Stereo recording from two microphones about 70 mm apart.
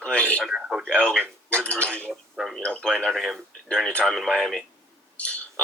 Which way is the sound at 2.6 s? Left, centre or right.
Centre.